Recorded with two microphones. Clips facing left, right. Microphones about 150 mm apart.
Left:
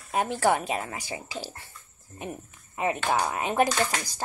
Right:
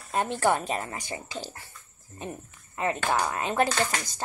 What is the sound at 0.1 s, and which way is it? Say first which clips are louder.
Speech: left 1 dB; 10° left (ahead or behind).